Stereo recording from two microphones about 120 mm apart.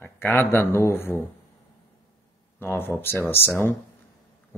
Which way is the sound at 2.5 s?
20° left (ahead or behind).